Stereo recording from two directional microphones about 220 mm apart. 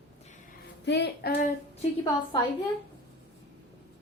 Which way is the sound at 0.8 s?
50° left (ahead or behind).